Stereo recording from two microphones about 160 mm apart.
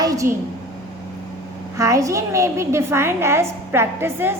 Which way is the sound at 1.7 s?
20° right (ahead or behind).